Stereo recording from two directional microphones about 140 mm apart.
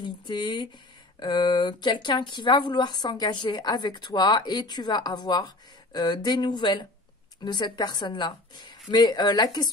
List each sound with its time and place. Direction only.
0.0 s speech: 30° left (ahead or behind)